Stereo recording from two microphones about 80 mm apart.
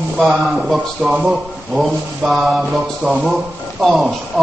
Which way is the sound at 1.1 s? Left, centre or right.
Centre.